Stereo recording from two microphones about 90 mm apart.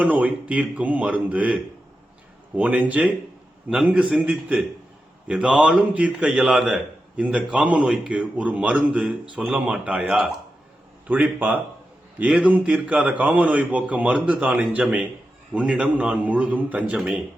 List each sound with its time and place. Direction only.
0.0 s a man's voice: 15° right (ahead or behind)
2.6 s a man's voice: 15° right (ahead or behind)